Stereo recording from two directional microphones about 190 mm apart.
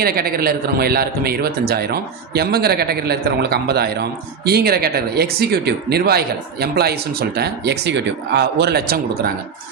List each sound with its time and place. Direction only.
0.0 s speech: 55° right (ahead or behind)